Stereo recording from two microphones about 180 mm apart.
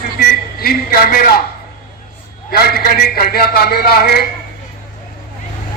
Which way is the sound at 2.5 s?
60° left (ahead or behind).